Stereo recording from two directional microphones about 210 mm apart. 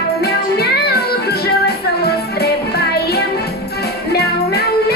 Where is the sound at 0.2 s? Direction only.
50° left (ahead or behind).